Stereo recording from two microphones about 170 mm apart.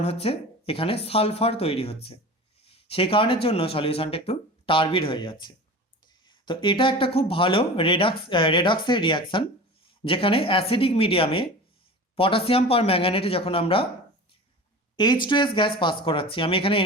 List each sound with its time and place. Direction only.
0.0 s speech: 35° left (ahead or behind)
14.9 s speech: 25° left (ahead or behind)